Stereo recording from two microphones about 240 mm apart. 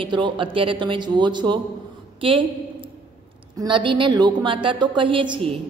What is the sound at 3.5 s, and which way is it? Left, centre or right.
A woman's voice, centre.